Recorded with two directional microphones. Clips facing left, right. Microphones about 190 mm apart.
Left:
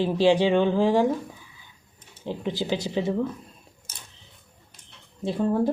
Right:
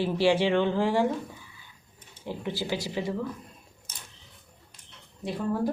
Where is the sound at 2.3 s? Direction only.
20° left (ahead or behind).